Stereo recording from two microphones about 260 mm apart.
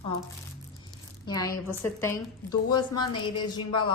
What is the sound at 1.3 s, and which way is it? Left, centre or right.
A woman's voice, centre.